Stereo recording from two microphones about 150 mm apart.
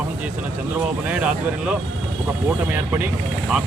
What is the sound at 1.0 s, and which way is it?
Speech, 10° right (ahead or behind).